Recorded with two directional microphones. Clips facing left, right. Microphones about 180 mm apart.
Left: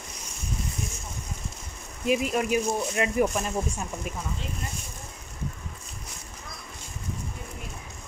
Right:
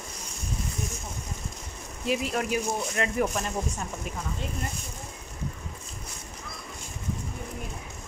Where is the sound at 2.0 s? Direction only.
15° left (ahead or behind).